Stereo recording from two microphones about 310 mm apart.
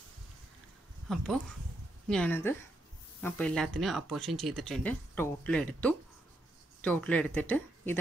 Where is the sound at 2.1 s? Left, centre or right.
Centre.